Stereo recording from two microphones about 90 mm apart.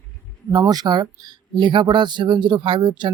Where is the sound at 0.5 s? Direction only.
45° right (ahead or behind).